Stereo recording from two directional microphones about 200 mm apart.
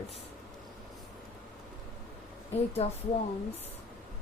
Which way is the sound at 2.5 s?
30° left (ahead or behind).